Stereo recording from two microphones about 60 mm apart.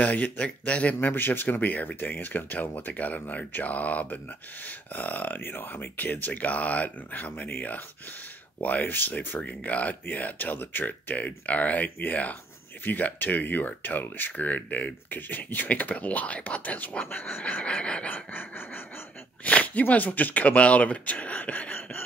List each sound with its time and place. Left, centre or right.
0.0 s speech: left
1.0 s speech: left
9.4 s speech: left
18.1 s a sound: left
19.4 s speech: left